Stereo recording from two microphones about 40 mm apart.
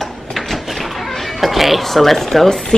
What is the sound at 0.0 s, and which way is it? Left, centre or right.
Cat, centre.